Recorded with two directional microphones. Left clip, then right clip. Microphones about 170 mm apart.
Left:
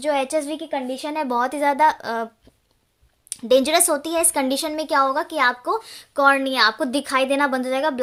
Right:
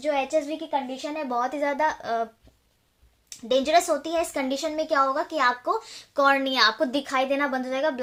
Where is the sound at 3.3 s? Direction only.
45° left (ahead or behind).